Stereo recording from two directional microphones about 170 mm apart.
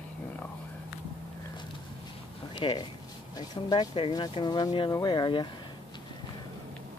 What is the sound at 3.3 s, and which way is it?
Speech, 25° left (ahead or behind).